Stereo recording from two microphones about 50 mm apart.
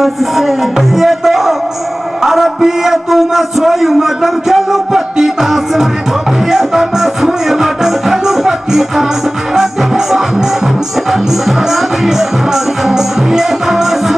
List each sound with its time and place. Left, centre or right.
0.0 s a man's voice: centre
6.4 s music: centre